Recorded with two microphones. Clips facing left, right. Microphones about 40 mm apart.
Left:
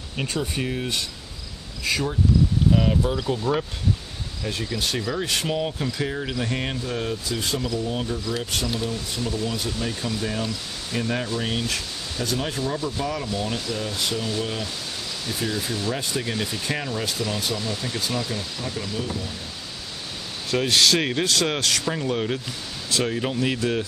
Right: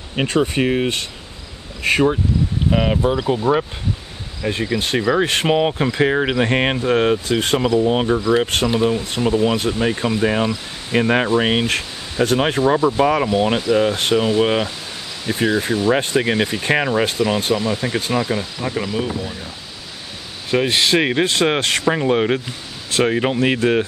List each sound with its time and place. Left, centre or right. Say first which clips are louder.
0.1 s speech: right 9 dB; right
8.2 s speech: right 10 dB; right
15.2 s speech: right 10 dB; right
17.6 s speech: right 8 dB; right
20.5 s speech: right 4 dB; right